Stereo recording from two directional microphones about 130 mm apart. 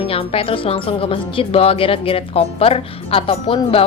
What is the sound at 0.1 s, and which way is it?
Speech, 45° left (ahead or behind).